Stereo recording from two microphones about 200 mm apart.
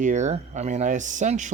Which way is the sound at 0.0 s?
35° right (ahead or behind).